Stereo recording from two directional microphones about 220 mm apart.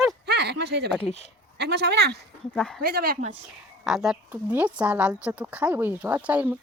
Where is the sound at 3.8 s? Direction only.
Centre (ahead or behind).